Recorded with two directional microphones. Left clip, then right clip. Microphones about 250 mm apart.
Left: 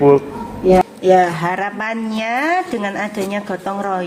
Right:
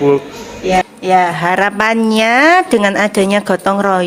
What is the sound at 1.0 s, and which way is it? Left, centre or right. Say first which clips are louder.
A woman's voice: right 1 dB; right.